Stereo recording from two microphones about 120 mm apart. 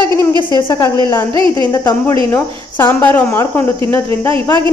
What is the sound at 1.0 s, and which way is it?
Speech, 25° left (ahead or behind).